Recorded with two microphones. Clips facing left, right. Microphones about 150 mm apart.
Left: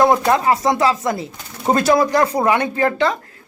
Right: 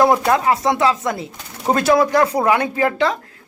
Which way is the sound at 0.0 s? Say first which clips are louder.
Even; 5° right (ahead or behind).